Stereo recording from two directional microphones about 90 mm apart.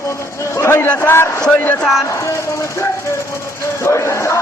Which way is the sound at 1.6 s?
20° left (ahead or behind).